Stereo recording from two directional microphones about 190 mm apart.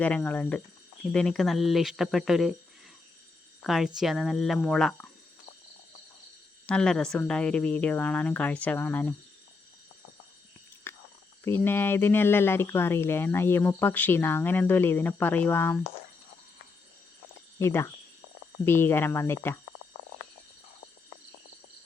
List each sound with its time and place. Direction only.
0.0 s speech: 10° left (ahead or behind)
3.6 s speech: centre (ahead or behind)
6.7 s speech: 5° left (ahead or behind)
10.9 s whispering: 10° left (ahead or behind)
11.4 s speech: 10° left (ahead or behind)
17.6 s speech: 15° left (ahead or behind)